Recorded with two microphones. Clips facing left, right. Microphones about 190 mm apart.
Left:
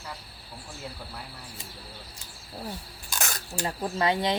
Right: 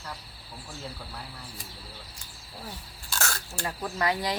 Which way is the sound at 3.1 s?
15° left (ahead or behind).